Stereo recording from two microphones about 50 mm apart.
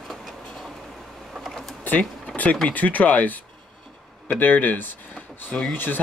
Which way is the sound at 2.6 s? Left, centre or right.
Left.